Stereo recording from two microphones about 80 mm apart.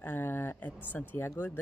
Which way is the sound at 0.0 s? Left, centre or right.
Left.